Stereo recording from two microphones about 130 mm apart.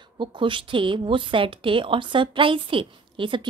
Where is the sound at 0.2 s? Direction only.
40° right (ahead or behind).